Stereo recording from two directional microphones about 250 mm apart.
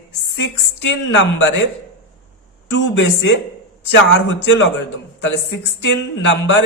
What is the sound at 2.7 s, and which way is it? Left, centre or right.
Speech, left.